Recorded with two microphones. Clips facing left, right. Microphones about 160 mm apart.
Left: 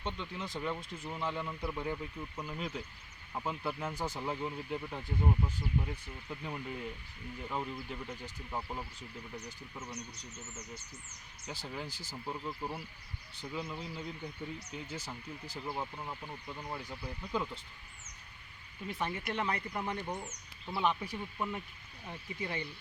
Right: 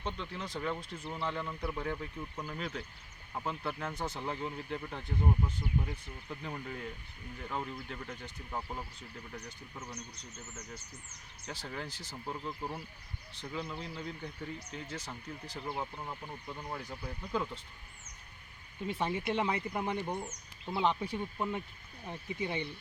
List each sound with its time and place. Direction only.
0.0 s speech: centre (ahead or behind)
11.4 s speech: 5° left (ahead or behind)
18.9 s speech: 25° right (ahead or behind)